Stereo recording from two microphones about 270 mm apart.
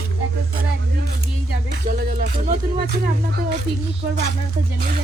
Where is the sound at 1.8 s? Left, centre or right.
Right.